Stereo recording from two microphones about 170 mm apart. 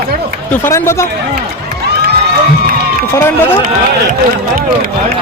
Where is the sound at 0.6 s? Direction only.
15° left (ahead or behind).